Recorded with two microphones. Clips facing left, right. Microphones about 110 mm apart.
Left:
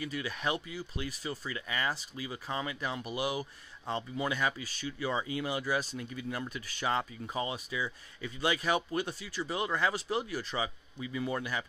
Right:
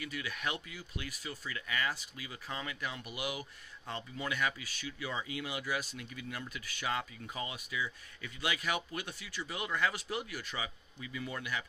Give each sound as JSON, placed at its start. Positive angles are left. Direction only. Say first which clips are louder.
{"t": 0.0, "sound": "speech", "louder": "left 4 dB", "side_deg": 35}